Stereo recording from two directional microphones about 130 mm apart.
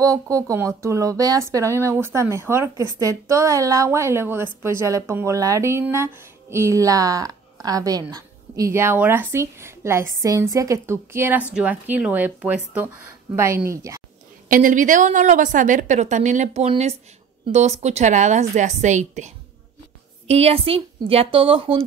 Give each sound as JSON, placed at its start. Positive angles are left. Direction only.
{"t": 0.0, "sound": "speech", "side_deg": -25}
{"t": 13.7, "sound": "speech", "side_deg": -25}
{"t": 14.5, "sound": "a woman's voice", "side_deg": -85}
{"t": 16.6, "sound": "a woman's voice", "side_deg": -55}
{"t": 20.2, "sound": "speech", "side_deg": -50}